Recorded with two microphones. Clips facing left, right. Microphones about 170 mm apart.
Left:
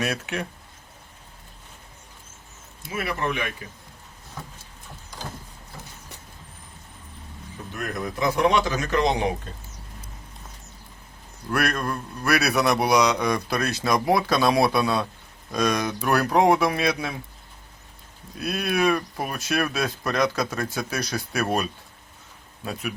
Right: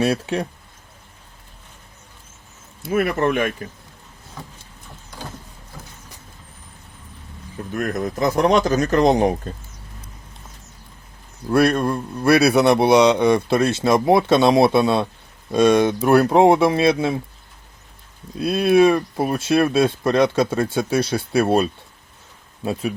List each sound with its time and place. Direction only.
0.0 s speech: 30° right (ahead or behind)
2.9 s speech: 50° right (ahead or behind)
7.7 s speech: 45° right (ahead or behind)
11.5 s speech: 30° right (ahead or behind)
18.3 s speech: 25° right (ahead or behind)